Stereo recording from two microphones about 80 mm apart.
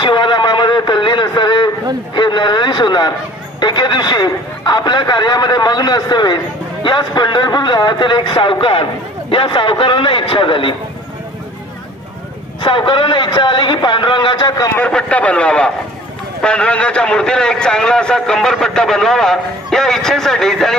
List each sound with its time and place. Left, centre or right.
0.0 s a sound: left
2.1 s a man's voice: left
12.6 s a man's voice: left
14.8 s a man's voice: centre